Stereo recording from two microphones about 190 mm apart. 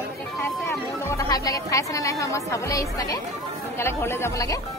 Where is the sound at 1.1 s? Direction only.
15° left (ahead or behind).